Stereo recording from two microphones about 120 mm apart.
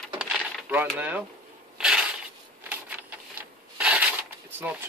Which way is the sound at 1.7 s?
5° right (ahead or behind).